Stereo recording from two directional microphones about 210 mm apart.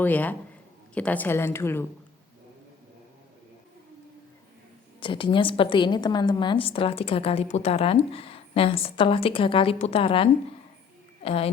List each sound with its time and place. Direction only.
0.0 s a woman's voice: 10° left (ahead or behind)
4.9 s a woman's voice: 25° left (ahead or behind)